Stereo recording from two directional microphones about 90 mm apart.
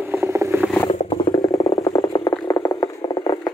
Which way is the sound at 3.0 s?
50° left (ahead or behind).